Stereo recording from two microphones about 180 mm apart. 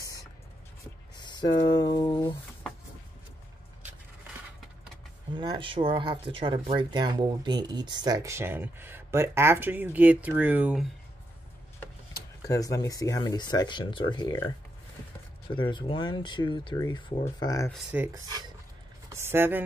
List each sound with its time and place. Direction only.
1.1 s speech: 25° left (ahead or behind)
5.3 s speech: 25° right (ahead or behind); by 10.9 s 5° right (ahead or behind)
12.4 s speech: 20° left (ahead or behind)
15.5 s speech: 25° left (ahead or behind)
17.9 s speech: 10° right (ahead or behind)